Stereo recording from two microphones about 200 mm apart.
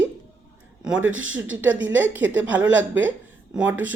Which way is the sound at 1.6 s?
5° right (ahead or behind).